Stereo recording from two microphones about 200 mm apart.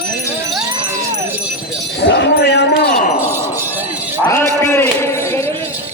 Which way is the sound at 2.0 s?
60° left (ahead or behind).